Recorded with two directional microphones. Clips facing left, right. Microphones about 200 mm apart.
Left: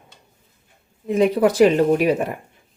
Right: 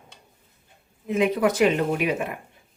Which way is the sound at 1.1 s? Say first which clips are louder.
Left 5 dB; 35° left (ahead or behind).